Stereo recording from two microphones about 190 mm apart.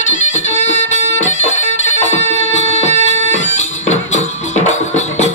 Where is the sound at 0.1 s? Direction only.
40° left (ahead or behind).